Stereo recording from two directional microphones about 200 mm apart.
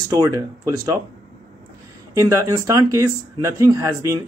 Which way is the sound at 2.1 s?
15° right (ahead or behind).